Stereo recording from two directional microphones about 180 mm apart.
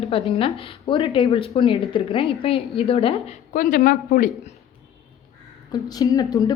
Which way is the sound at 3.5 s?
50° left (ahead or behind).